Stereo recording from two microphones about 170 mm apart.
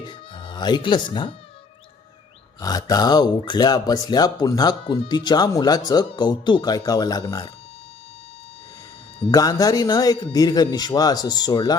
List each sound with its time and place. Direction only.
0.0 s speech: 30° left (ahead or behind)
2.6 s speech: 20° left (ahead or behind)
9.3 s speech: 20° left (ahead or behind)